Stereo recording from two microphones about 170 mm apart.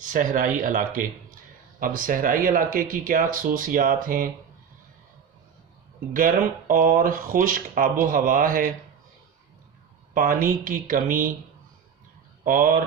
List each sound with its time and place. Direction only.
0.0 s speech: 50° right (ahead or behind)
6.1 s speech: 55° right (ahead or behind)
10.2 s speech: 55° right (ahead or behind)
12.5 s speech: 55° right (ahead or behind)